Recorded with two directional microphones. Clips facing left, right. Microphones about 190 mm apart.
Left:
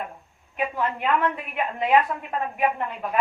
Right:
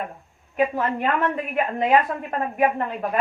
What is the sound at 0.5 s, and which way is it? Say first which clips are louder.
Speech: right 4 dB; 45° right (ahead or behind).